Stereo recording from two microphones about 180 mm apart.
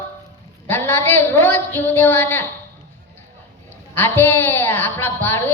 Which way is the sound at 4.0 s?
10° left (ahead or behind).